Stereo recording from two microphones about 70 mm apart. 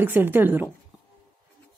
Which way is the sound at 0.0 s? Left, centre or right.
Right.